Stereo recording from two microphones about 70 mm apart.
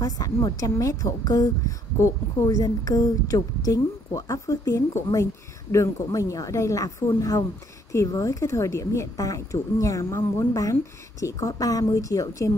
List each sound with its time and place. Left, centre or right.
0.0 s a woman's voice: left
2.0 s a woman's voice: left
2.6 s a woman's voice: left
10.0 s a woman's voice: left
10.6 s a woman's voice: left